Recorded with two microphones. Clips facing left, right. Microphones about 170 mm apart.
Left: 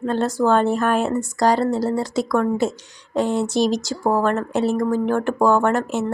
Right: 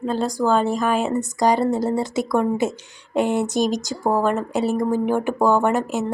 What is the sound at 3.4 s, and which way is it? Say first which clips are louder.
Speech: left 1 dB; 45° right (ahead or behind).